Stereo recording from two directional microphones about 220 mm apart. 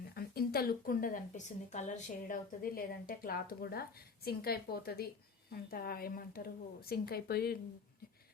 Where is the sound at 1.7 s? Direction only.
30° left (ahead or behind).